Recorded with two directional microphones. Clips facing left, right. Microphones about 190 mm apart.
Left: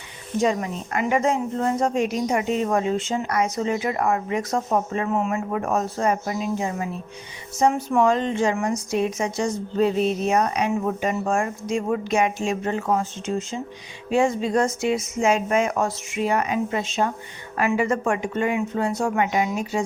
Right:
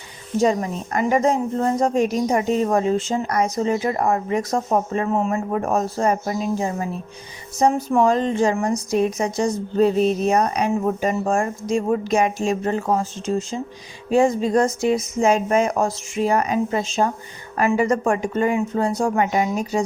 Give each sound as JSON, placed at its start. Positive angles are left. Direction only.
{"t": 0.4, "sound": "a woman's voice", "side_deg": -40}